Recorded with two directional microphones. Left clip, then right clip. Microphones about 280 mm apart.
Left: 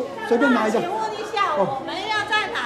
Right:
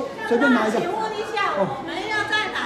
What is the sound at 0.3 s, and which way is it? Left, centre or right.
Speech, centre.